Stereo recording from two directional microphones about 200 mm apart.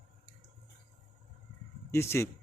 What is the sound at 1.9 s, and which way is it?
Speech, 15° left (ahead or behind).